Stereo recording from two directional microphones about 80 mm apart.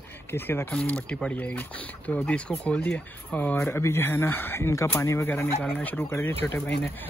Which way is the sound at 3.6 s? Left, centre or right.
Left.